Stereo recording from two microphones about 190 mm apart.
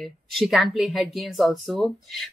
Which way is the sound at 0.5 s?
Centre (ahead or behind).